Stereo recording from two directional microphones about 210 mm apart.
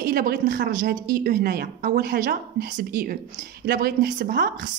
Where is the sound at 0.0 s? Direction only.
45° right (ahead or behind).